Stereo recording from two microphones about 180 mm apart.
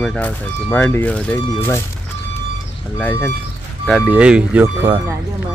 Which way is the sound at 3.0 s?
10° left (ahead or behind).